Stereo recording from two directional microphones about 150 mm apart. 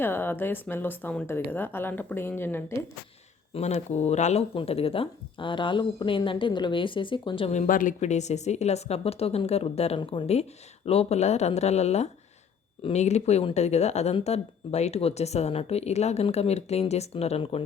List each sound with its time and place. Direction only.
0.0 s a woman's voice: 15° left (ahead or behind)
3.5 s a woman's voice: 45° left (ahead or behind)
7.5 s speech: 55° left (ahead or behind); by 17.6 s 40° left (ahead or behind)